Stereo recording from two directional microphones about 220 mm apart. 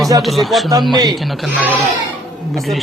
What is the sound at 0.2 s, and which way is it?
Speech, centre (ahead or behind).